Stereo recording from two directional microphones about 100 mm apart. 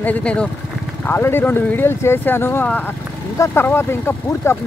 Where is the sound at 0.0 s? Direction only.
15° left (ahead or behind).